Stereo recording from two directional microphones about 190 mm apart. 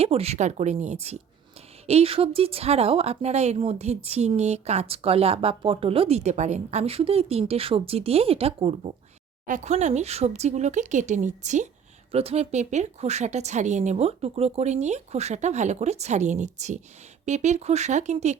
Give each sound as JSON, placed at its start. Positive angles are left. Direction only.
{"t": 0.0, "sound": "speech", "side_deg": -30}